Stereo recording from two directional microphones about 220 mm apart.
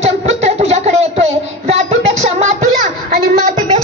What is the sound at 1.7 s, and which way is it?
Child singing, 30° right (ahead or behind).